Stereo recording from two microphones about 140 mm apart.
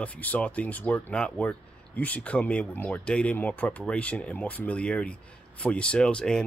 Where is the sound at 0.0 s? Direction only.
10° left (ahead or behind).